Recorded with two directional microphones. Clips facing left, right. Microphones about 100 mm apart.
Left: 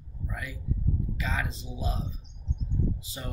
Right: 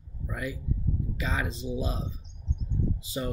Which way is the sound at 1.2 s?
15° right (ahead or behind).